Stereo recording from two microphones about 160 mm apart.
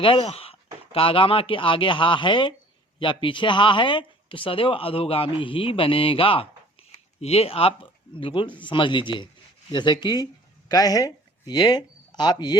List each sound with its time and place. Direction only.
0.0 s speech: 35° left (ahead or behind)